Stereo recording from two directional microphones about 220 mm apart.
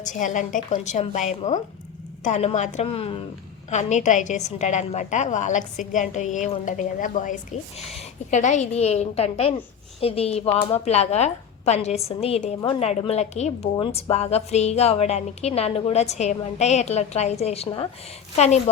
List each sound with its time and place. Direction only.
0.0 s a woman's voice: 35° left (ahead or behind)